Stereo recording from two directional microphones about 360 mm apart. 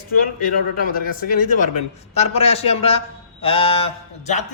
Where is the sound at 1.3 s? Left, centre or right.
Left.